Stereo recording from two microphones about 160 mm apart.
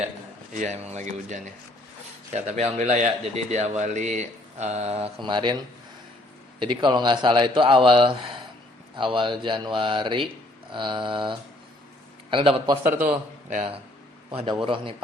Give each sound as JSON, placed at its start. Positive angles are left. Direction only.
{"t": 0.5, "sound": "a man's voice", "side_deg": -45}
{"t": 6.6, "sound": "speech", "side_deg": -30}
{"t": 13.5, "sound": "a man's voice", "side_deg": -45}
{"t": 14.3, "sound": "a man's voice", "side_deg": -30}